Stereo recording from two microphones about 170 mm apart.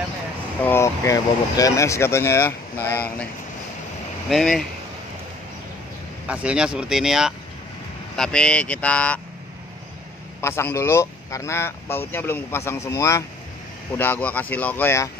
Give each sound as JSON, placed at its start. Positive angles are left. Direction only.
{"t": 0.7, "sound": "speech", "side_deg": 15}
{"t": 4.3, "sound": "speech", "side_deg": 0}
{"t": 6.2, "sound": "speech", "side_deg": -5}
{"t": 10.4, "sound": "speech", "side_deg": 15}